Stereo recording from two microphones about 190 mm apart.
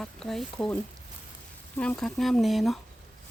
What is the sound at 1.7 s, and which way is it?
Speech, 5° left (ahead or behind).